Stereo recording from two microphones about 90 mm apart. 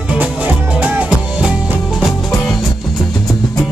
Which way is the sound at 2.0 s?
Centre (ahead or behind).